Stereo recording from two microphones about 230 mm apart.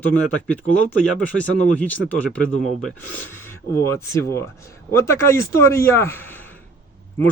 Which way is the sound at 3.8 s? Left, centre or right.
Centre.